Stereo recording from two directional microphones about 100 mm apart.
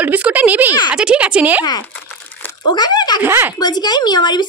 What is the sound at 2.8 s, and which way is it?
Speech, 45° left (ahead or behind).